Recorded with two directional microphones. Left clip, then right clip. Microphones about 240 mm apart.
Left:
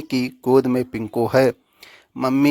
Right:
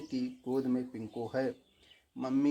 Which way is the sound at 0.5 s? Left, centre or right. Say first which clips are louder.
Left 17 dB; left.